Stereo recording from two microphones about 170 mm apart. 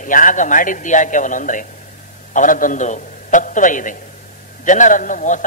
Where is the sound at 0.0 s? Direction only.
50° left (ahead or behind).